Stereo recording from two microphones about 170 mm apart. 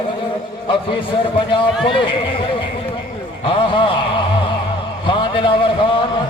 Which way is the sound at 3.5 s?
30° left (ahead or behind).